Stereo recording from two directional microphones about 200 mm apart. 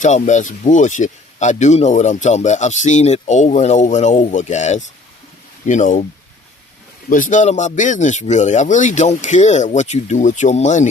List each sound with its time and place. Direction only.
0.0 s speech: 35° left (ahead or behind)
7.1 s speech: 40° left (ahead or behind)